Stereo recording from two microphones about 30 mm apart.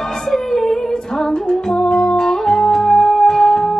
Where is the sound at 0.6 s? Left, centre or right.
Centre.